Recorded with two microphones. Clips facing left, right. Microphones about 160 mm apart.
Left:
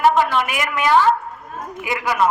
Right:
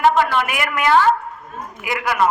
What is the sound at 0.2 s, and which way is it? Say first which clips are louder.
Speech: even; 20° left (ahead or behind).